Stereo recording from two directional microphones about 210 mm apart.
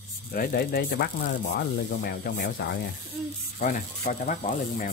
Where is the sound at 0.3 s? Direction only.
45° left (ahead or behind).